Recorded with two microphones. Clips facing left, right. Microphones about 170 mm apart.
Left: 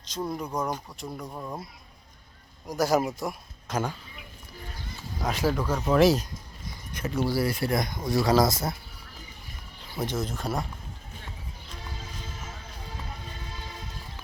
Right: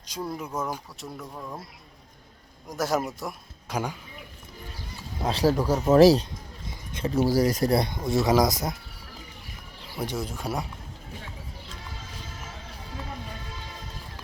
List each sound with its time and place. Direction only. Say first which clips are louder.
0.2 s speech: left 1 dB; 5° right (ahead or behind)
1.2 s speech: left 1 dB; 15° left (ahead or behind)
2.6 s speech: left 3 dB; centre (ahead or behind)
3.7 s speech: left 1 dB; 10° right (ahead or behind)
5.2 s speech: right 4 dB; 35° right (ahead or behind)
6.7 s a sound: right 3 dB; 25° right (ahead or behind)
7.3 s speech: right 5 dB; 40° right (ahead or behind); by 8.7 s 15° right (ahead or behind)
10.1 s speech: left 1 dB; 10° right (ahead or behind)